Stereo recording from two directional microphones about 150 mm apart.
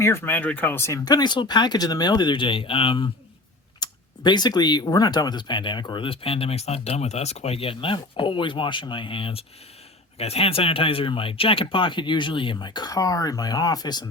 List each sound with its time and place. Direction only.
0.0 s speech: 15° left (ahead or behind)